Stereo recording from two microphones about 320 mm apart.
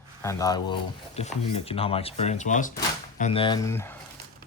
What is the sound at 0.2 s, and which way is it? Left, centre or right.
Speech, centre.